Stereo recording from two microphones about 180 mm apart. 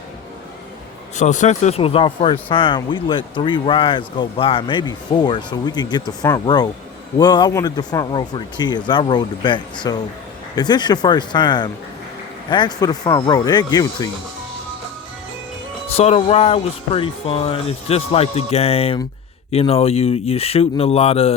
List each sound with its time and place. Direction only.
1.1 s speech: 40° left (ahead or behind); by 14.1 s 20° left (ahead or behind)
15.9 s speech: 35° left (ahead or behind)